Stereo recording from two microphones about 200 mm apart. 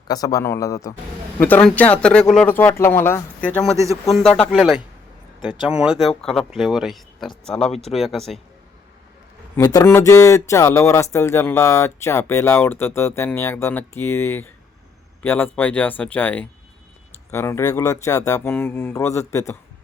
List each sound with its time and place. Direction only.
0.1 s speech: 20° left (ahead or behind); by 8.4 s centre (ahead or behind)
9.6 s speech: 15° left (ahead or behind)